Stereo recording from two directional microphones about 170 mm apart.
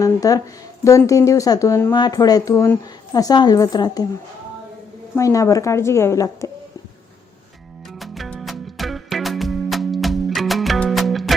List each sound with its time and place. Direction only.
0.0 s speech: 20° left (ahead or behind)
5.1 s a woman's voice: 20° left (ahead or behind)
7.9 s music: centre (ahead or behind)